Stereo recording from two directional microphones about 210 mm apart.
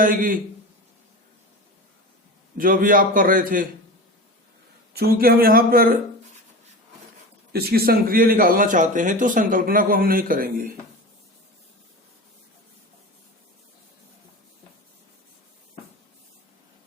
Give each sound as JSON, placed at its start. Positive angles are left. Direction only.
{"t": 0.0, "sound": "a man's voice", "side_deg": -40}
{"t": 2.6, "sound": "a man's voice", "side_deg": -40}
{"t": 4.9, "sound": "speech", "side_deg": -45}
{"t": 7.5, "sound": "speech", "side_deg": -45}